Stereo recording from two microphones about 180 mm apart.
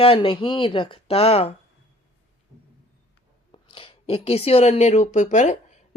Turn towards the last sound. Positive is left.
turn(degrees=40)  # may be behind; listen again after turning